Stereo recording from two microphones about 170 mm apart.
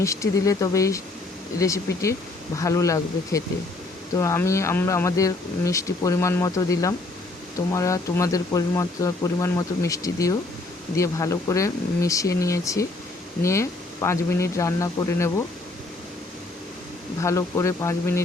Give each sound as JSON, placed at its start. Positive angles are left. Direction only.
{"t": 0.0, "sound": "speech", "side_deg": 20}
{"t": 17.2, "sound": "speech", "side_deg": 20}